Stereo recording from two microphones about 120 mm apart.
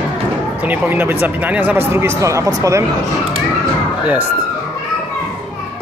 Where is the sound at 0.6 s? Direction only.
15° right (ahead or behind).